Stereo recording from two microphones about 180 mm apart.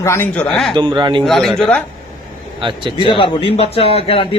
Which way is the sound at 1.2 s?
Centre (ahead or behind).